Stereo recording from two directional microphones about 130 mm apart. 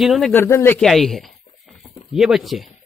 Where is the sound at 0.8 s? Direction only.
Centre (ahead or behind).